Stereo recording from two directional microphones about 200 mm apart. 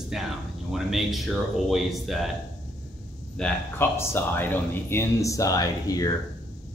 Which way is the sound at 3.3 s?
10° left (ahead or behind).